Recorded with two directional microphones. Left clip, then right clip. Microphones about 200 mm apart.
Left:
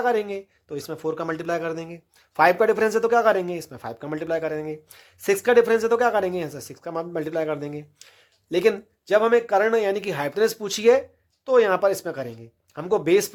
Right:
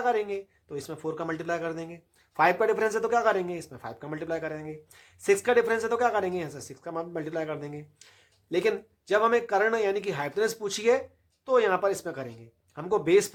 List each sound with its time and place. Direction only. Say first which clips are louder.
0.0 s speech: left 4 dB; 40° left (ahead or behind)